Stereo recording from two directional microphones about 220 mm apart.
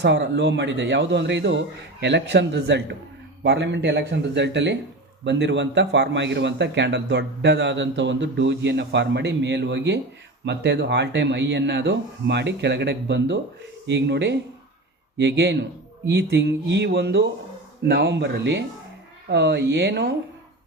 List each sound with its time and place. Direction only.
0.0 s a man's voice: 50° right (ahead or behind)